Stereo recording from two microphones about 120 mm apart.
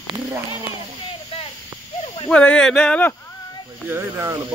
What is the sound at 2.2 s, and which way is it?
Speech, 10° left (ahead or behind).